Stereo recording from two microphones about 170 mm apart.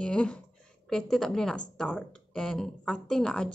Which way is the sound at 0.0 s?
5° left (ahead or behind).